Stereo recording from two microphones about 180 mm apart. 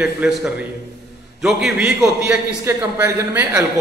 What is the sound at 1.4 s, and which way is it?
A man's voice, centre (ahead or behind).